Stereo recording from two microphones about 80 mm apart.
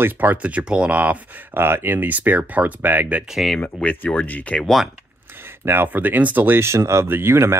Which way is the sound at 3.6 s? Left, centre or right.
Left.